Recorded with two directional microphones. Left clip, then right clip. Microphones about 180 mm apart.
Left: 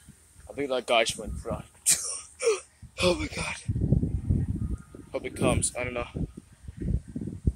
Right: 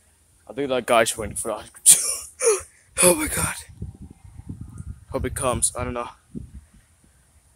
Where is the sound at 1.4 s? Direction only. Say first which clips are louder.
Right 9 dB; 80° right; by 3.6 s 50° right (ahead or behind).